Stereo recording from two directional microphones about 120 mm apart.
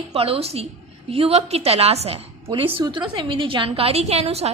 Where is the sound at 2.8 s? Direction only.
40° right (ahead or behind); by 4.5 s 60° right (ahead or behind).